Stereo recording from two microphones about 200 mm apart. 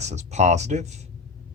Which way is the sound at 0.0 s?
35° right (ahead or behind).